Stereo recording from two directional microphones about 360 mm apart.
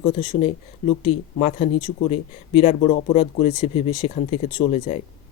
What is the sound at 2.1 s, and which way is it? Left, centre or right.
Speech, centre.